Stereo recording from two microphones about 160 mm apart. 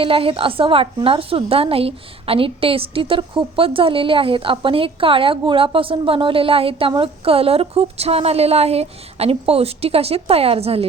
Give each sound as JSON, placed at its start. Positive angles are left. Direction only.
{"t": 0.0, "sound": "a woman's voice", "side_deg": -35}